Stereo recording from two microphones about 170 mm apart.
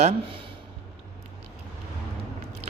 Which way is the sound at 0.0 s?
35° right (ahead or behind).